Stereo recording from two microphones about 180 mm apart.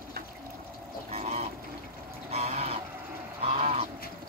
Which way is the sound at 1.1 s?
35° right (ahead or behind).